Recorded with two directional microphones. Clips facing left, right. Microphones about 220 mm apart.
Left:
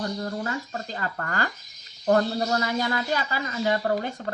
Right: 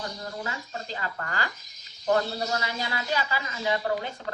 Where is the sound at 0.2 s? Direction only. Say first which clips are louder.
Left 6 dB; 45° left (ahead or behind).